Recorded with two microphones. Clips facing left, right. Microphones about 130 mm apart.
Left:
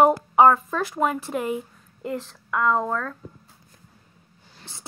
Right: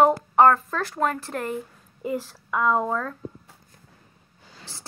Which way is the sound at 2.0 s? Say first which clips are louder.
Right 2 dB; 5° right (ahead or behind).